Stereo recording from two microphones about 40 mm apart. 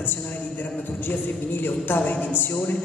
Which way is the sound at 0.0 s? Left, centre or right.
Left.